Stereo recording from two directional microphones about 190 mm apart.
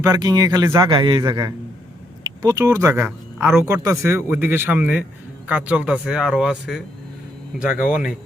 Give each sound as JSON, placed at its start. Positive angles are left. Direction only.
{"t": 0.0, "sound": "speech", "side_deg": -20}
{"t": 7.9, "sound": "speech", "side_deg": -5}